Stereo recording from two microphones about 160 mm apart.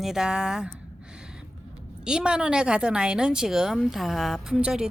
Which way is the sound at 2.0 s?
5° right (ahead or behind).